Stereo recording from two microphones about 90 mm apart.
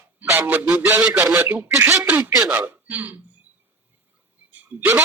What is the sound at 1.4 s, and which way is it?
Speech, 25° right (ahead or behind).